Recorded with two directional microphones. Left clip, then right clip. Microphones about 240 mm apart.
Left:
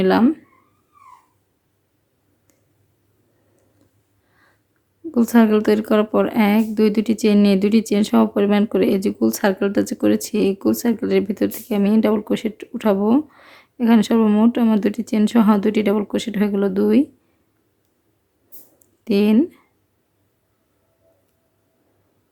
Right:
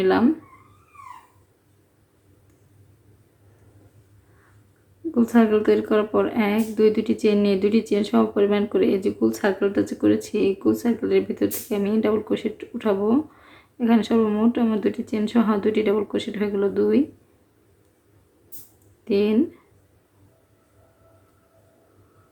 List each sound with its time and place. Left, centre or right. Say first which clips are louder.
0.0 s speech: left 3 dB; left
5.1 s speech: left 3 dB; left
19.0 s speech: left 3 dB; left